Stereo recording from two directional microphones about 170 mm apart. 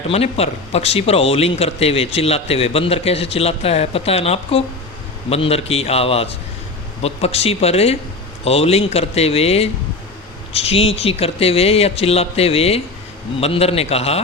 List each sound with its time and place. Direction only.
0.1 s speech: 35° left (ahead or behind)